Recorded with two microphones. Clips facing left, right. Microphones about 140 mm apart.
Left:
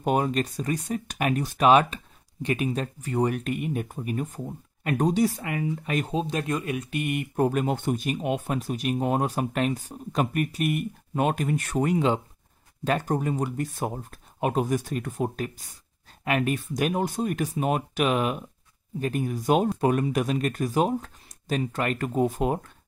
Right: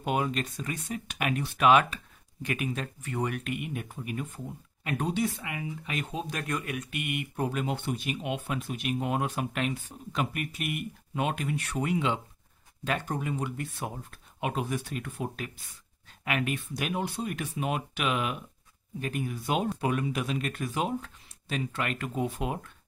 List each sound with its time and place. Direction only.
0.0 s speech: 40° left (ahead or behind)
6.1 s speech: 25° left (ahead or behind); by 22.7 s 45° left (ahead or behind)